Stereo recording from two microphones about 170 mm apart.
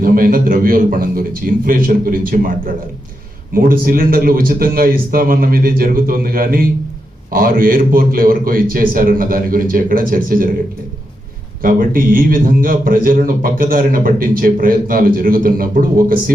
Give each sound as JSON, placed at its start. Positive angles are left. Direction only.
{"t": 0.0, "sound": "a man's voice", "side_deg": -55}
{"t": 11.6, "sound": "a man's voice", "side_deg": -55}